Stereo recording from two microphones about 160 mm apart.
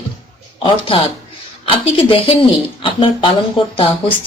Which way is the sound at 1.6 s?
35° left (ahead or behind).